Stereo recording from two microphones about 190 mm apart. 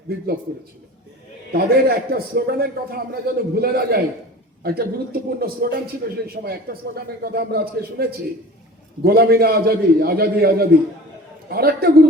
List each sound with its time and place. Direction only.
1.5 s a man's voice: 55° right (ahead or behind)
9.0 s a man's voice: 55° right (ahead or behind)